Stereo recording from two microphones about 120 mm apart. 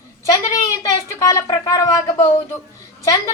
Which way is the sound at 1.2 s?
30° left (ahead or behind).